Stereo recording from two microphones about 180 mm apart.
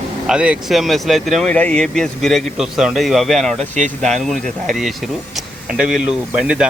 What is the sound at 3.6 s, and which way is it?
Speech, 40° right (ahead or behind).